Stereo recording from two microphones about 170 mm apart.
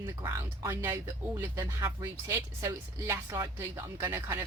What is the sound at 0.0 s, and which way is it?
Speech, 20° right (ahead or behind).